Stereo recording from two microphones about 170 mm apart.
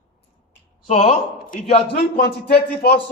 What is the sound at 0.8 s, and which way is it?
A man's voice, 40° left (ahead or behind).